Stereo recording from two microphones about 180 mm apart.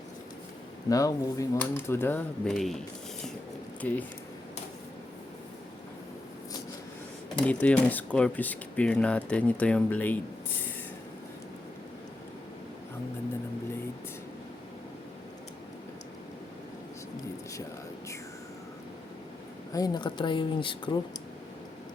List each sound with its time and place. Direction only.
0.9 s speech: 20° left (ahead or behind)
7.4 s speech: 5° left (ahead or behind)
19.7 s speech: 20° left (ahead or behind)